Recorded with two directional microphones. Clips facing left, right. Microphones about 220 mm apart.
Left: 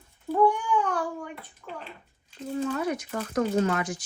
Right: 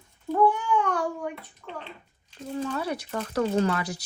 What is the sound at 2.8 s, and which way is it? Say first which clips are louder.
Speech: left 1 dB; 35° right (ahead or behind).